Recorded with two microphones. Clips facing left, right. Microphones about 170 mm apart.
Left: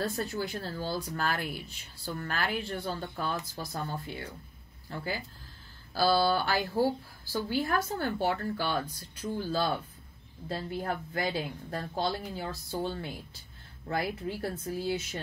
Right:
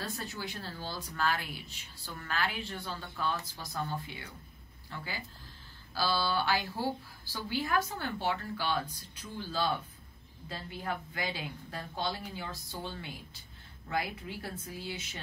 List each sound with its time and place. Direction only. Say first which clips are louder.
0.0 s a woman's voice: left 7 dB; 45° left (ahead or behind)